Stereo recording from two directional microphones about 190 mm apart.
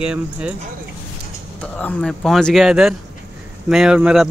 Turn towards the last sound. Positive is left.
turn(degrees=-5)  # may be behind; listen again after turning